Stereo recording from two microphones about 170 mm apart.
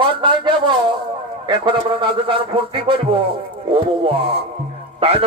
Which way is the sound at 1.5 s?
30° right (ahead or behind).